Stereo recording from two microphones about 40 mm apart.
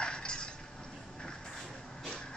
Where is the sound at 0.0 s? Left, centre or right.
Left.